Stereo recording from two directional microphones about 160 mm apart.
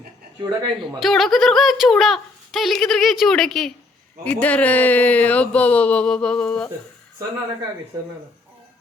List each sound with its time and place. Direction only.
0.4 s speech: 25° right (ahead or behind)
0.9 s speech: centre (ahead or behind)